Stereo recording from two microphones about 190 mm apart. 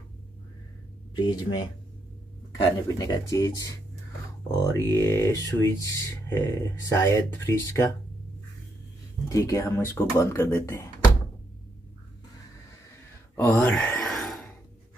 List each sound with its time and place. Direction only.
1.1 s speech: 25° left (ahead or behind)
9.3 s speech: 15° left (ahead or behind)
13.4 s sigh: 10° left (ahead or behind)